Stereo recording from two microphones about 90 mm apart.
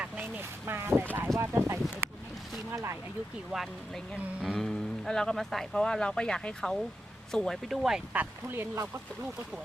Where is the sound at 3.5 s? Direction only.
Centre (ahead or behind).